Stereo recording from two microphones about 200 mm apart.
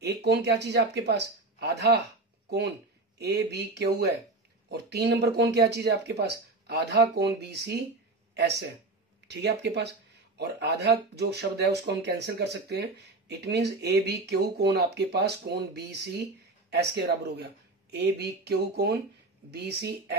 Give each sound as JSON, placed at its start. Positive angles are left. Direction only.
{"t": 0.0, "sound": "speech", "side_deg": -60}
{"t": 3.2, "sound": "speech", "side_deg": -55}